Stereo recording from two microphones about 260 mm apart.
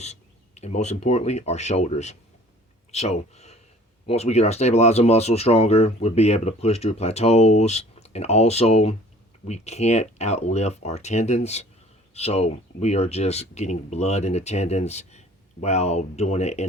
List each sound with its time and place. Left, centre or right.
0.0 s speech: left